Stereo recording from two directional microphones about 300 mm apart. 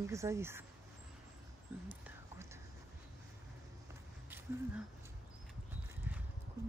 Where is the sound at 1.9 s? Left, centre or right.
Centre.